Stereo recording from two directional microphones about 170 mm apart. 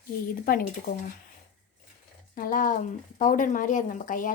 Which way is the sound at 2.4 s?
55° left (ahead or behind).